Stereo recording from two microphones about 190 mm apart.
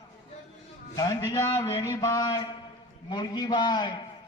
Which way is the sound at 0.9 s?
20° left (ahead or behind).